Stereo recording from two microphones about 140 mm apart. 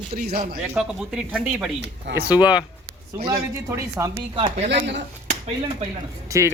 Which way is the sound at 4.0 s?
15° right (ahead or behind).